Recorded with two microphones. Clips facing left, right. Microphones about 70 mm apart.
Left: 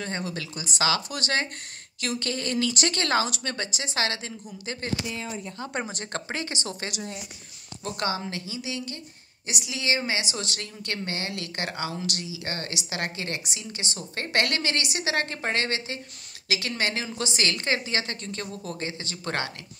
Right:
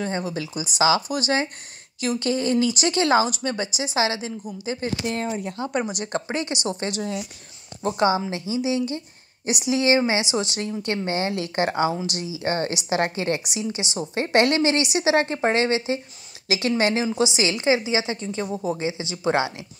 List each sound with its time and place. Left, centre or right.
0.0 s a woman's voice: centre
6.6 s a woman's voice: right